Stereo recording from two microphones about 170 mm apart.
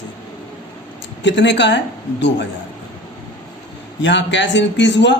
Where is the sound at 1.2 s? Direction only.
90° left.